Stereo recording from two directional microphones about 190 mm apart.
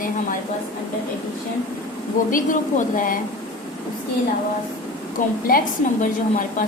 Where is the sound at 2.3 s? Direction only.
45° left (ahead or behind).